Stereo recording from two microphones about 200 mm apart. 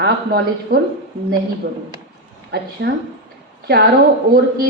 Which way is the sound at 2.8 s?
60° right (ahead or behind).